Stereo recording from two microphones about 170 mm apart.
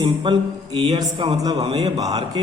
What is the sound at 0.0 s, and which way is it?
A man's voice, 25° right (ahead or behind).